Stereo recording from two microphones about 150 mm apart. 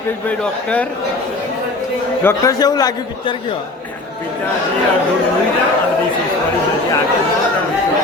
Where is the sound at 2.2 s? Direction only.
15° left (ahead or behind).